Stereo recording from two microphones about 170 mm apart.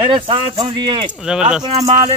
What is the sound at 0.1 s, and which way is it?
Speech, 30° right (ahead or behind).